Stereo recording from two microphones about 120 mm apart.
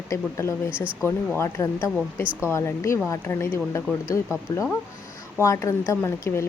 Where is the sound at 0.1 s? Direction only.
25° left (ahead or behind).